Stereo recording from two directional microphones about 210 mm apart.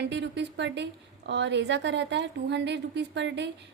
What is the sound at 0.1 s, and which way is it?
A woman's voice, 55° right (ahead or behind).